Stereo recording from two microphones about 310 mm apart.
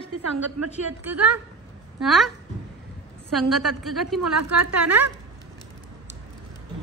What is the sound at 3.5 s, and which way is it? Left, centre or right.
Speech, centre.